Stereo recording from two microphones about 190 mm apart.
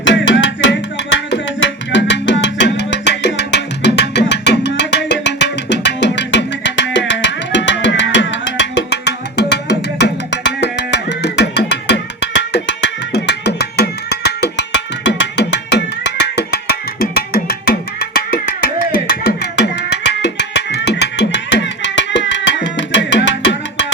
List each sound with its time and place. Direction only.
0.0 s music: 75° left (ahead or behind)
17.0 s percussion: 50° left (ahead or behind)
18.0 s music: 55° left (ahead or behind); by 23.8 s 75° left (ahead or behind)